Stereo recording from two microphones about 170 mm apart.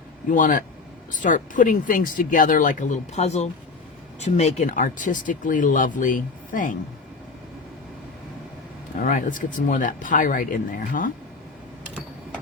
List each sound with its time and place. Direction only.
0.3 s speech: 50° left (ahead or behind)
9.0 s speech: 50° left (ahead or behind)